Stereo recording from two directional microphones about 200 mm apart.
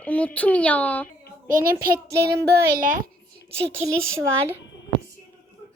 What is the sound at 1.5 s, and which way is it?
A child's voice, 45° right (ahead or behind).